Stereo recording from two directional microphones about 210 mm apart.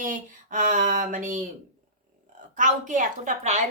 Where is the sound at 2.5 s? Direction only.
35° right (ahead or behind).